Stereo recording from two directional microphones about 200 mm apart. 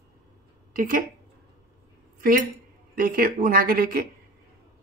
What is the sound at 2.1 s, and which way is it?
A woman's voice, 45° right (ahead or behind).